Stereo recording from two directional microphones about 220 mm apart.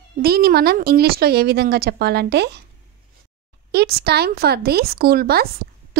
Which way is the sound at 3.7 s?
45° right (ahead or behind).